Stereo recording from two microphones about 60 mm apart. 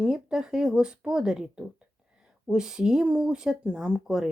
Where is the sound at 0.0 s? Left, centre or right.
Centre.